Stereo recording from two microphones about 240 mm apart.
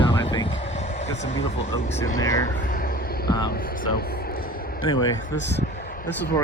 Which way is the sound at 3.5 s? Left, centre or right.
Left.